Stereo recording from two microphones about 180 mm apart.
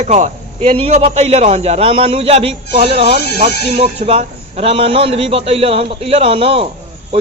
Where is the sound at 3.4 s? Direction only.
45° right (ahead or behind).